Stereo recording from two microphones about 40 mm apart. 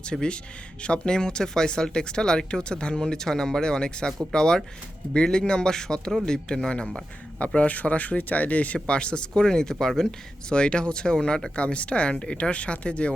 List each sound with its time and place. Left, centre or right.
0.0 s speech: left
7.3 s speech: left
8.9 s speech: left
10.5 s speech: left
11.5 s speech: left